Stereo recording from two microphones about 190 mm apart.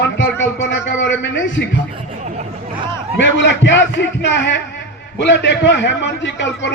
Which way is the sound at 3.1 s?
70° left (ahead or behind).